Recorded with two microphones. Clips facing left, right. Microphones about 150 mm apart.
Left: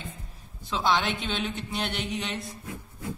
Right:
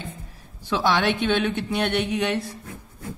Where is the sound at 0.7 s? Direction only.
65° right (ahead or behind).